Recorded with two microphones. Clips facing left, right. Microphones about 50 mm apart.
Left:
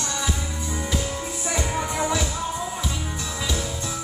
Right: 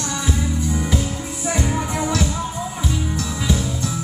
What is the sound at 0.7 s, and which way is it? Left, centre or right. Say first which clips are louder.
Music: right 4 dB; centre.